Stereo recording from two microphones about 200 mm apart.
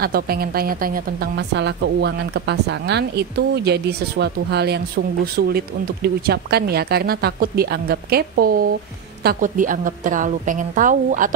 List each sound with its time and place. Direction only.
0.0 s a woman's voice: 50° right (ahead or behind)